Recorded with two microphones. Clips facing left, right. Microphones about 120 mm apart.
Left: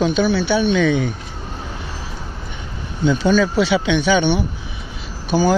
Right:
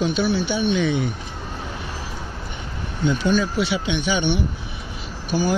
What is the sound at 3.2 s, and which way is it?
Speech, 90° left.